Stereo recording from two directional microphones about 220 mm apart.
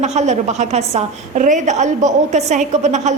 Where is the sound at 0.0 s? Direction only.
30° right (ahead or behind).